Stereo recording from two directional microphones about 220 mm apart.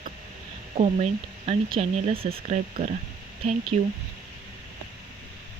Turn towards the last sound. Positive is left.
turn(degrees=-25)  # may be behind; listen again after turning